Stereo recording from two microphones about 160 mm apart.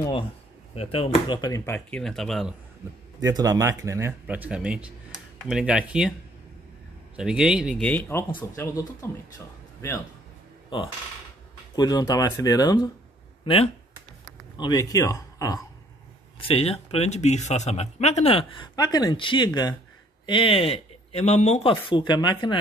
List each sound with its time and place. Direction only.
0.7 s speech: 35° left (ahead or behind)
1.4 s speech: 20° left (ahead or behind)
1.9 s speech: 5° left (ahead or behind)
3.2 s speech: 20° right (ahead or behind); by 6.1 s 5° right (ahead or behind)
7.2 s speech: 5° right (ahead or behind)
7.8 s speech: 10° left (ahead or behind)
11.7 s speech: 25° left (ahead or behind)
13.4 s a sound: 35° left (ahead or behind)
14.6 s speech: 25° left (ahead or behind)
16.3 s speech: 35° left (ahead or behind)
18.8 s speech: 25° left (ahead or behind)